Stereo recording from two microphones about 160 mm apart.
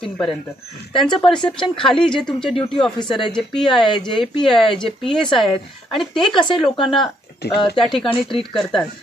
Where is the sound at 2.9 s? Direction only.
30° left (ahead or behind).